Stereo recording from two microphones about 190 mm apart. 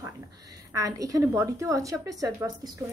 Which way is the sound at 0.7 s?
20° right (ahead or behind).